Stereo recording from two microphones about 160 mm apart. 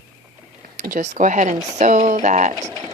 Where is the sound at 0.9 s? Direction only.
50° right (ahead or behind).